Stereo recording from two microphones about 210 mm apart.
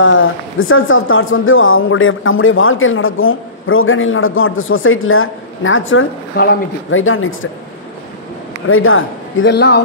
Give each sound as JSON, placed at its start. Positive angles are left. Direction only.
{"t": 0.0, "sound": "speech", "side_deg": 65}
{"t": 6.4, "sound": "speech", "side_deg": 50}
{"t": 6.9, "sound": "speech", "side_deg": 75}
{"t": 8.6, "sound": "speech", "side_deg": 70}